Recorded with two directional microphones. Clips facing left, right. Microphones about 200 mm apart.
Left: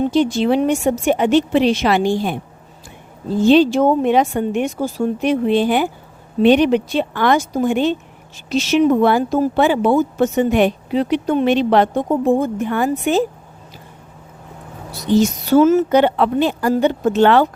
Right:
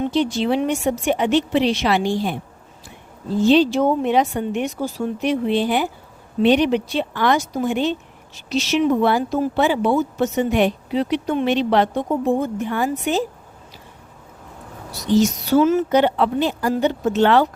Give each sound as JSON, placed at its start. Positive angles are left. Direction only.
{"t": 0.0, "sound": "speech", "side_deg": 45}
{"t": 3.4, "sound": "speech", "side_deg": 50}
{"t": 15.0, "sound": "a woman's voice", "side_deg": 55}